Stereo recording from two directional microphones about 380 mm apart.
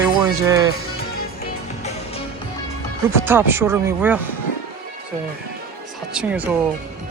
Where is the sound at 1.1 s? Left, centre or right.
Left.